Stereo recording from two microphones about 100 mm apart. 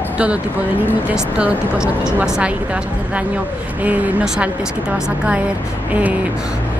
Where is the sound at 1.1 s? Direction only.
10° right (ahead or behind).